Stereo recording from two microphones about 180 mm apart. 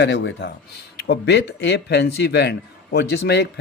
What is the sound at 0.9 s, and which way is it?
Speech, 70° left (ahead or behind).